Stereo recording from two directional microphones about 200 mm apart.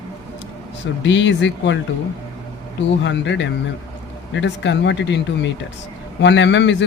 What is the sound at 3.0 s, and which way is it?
Speech, 65° left (ahead or behind).